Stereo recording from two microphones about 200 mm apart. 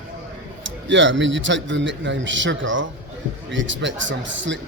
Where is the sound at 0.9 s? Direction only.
65° right (ahead or behind).